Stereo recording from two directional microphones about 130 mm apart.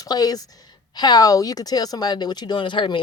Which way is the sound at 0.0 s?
30° left (ahead or behind).